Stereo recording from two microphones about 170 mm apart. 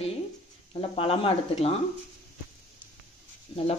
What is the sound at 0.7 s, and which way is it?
Speech, 35° left (ahead or behind).